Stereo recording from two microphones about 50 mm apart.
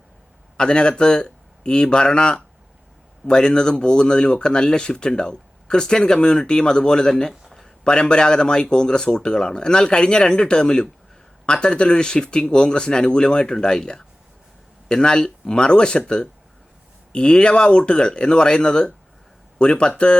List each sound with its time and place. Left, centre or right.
0.5 s speech: centre
7.4 s a sound: centre
7.9 s speech: centre